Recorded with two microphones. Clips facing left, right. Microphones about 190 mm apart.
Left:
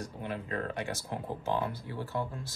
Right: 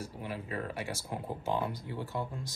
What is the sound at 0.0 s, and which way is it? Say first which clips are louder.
Speech: left 2 dB; 5° right (ahead or behind).